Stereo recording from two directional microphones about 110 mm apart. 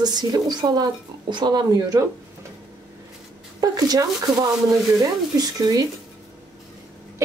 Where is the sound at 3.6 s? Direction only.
35° right (ahead or behind).